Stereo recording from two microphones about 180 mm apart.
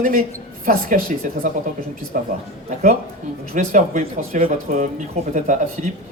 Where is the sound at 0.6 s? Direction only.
50° right (ahead or behind).